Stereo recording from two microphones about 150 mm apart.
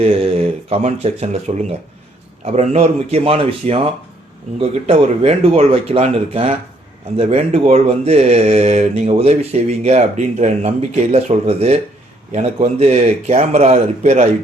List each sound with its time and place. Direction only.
0.0 s speech: 40° right (ahead or behind)